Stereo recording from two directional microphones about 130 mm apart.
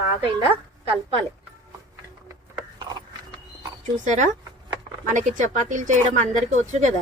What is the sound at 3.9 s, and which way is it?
Speech, 70° right (ahead or behind).